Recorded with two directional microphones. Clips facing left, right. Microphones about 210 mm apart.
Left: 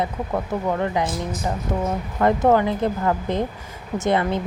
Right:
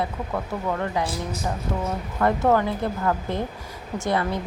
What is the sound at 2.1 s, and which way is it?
Speech, 20° left (ahead or behind).